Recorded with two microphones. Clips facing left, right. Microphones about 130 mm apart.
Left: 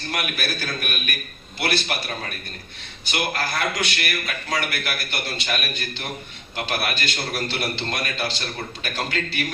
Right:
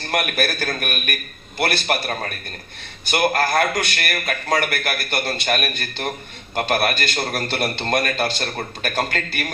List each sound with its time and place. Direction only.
0.1 s a man's voice: 50° right (ahead or behind)